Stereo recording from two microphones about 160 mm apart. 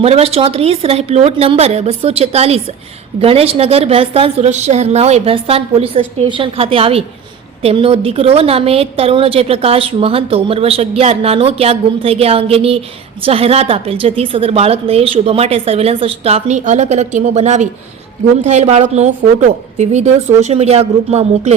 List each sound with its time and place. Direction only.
0.0 s a woman's voice: 40° right (ahead or behind)